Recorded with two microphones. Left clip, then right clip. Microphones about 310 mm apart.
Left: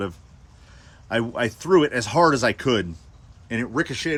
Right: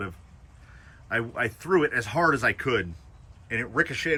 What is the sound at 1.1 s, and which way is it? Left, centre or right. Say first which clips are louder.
Speech: left 4 dB; centre.